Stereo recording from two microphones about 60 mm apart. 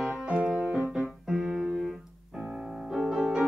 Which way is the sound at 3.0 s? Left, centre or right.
Centre.